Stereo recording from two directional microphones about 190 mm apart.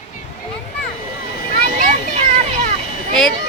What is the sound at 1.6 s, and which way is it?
Children playing, 40° right (ahead or behind).